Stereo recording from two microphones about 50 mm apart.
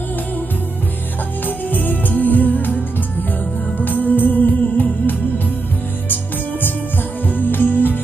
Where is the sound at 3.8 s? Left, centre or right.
Left.